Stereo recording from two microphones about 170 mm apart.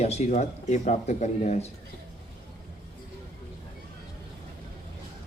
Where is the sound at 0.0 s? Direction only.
40° left (ahead or behind).